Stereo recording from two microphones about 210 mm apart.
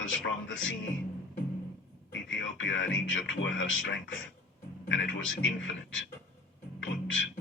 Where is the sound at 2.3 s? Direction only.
65° left (ahead or behind).